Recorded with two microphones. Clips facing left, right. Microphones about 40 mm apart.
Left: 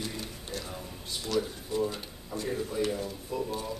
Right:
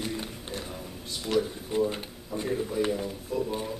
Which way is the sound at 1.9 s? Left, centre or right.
Right.